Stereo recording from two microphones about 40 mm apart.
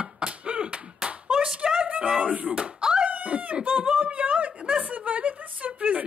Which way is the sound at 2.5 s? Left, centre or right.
Centre.